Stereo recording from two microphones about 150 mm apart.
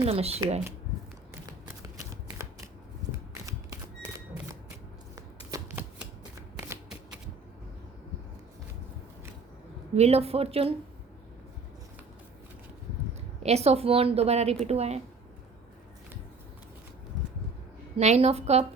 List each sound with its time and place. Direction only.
0.0 s a woman's voice: 40° right (ahead or behind)
1.8 s shuffling cards: 20° right (ahead or behind)
3.4 s camera: 20° right (ahead or behind)
5.1 s shuffling cards: 20° right (ahead or behind)
9.9 s a woman's voice: 45° right (ahead or behind)
13.4 s a woman's voice: 45° right (ahead or behind)
17.9 s a woman's voice: 45° right (ahead or behind)